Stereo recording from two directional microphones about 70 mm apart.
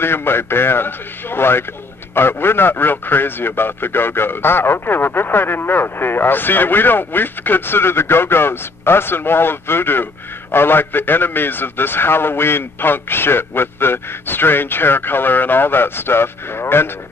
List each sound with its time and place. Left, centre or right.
0.0 s a man's voice: left